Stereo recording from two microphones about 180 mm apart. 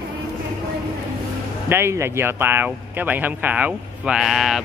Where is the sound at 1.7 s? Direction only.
15° right (ahead or behind).